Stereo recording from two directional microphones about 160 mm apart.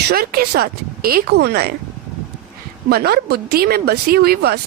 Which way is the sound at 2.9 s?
75° right (ahead or behind).